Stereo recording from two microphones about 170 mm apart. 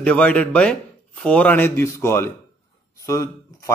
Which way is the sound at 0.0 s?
10° left (ahead or behind).